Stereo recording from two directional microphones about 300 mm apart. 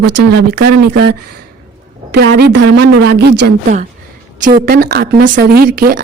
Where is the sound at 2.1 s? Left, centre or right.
Right.